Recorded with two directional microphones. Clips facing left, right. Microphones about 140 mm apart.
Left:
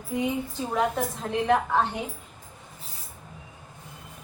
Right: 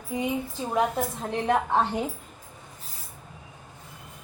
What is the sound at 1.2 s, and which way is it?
Speech, 20° right (ahead or behind).